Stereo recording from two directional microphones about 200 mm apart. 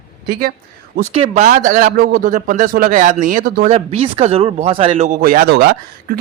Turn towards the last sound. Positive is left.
turn(degrees=-50)  # may be behind; listen again after turning